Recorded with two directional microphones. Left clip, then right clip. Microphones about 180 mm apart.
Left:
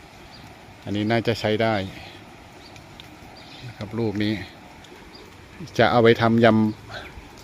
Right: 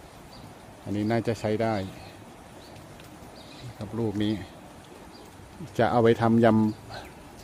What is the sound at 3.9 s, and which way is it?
Speech, 15° left (ahead or behind).